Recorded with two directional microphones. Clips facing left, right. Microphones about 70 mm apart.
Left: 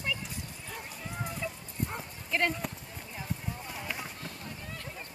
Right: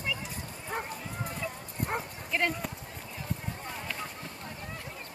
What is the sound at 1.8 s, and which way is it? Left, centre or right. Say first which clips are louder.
Dog: right 4 dB; right.